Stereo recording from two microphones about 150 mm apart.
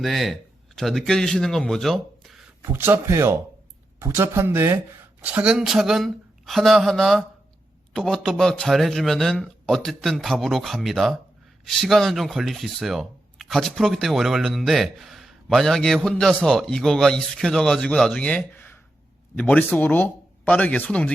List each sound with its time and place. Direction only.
0.0 s speech: centre (ahead or behind)
2.6 s speech: 15° right (ahead or behind); by 21.1 s 10° left (ahead or behind)